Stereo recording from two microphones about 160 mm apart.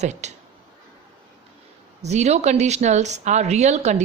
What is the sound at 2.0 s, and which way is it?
Speech, 45° right (ahead or behind).